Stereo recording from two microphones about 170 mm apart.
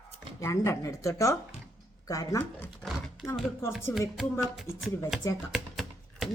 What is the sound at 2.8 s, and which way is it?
Speech, centre (ahead or behind).